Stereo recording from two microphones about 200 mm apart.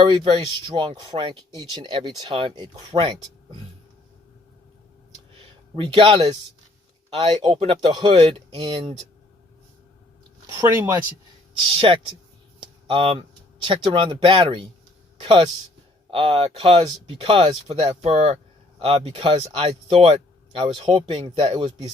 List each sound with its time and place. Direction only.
0.0 s speech: 25° right (ahead or behind)
5.7 s speech: 25° right (ahead or behind)
10.4 s speech: 20° right (ahead or behind)
11.8 s speech: 25° right (ahead or behind)